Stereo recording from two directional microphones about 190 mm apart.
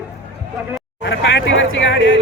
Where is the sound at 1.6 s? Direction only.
75° left (ahead or behind).